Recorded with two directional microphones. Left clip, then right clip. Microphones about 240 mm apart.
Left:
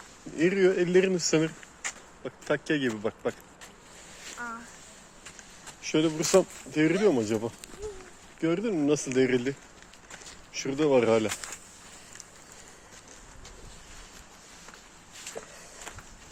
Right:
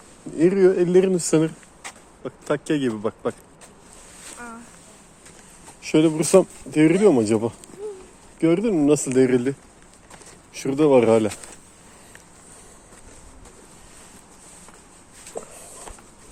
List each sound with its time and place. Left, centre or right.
0.3 s speech: centre
1.8 s a sound: centre
2.2 s speech: centre
5.8 s speech: right
15.3 s walk: centre